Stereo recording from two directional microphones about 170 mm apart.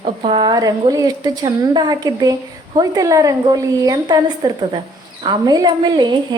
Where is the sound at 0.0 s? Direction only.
30° right (ahead or behind).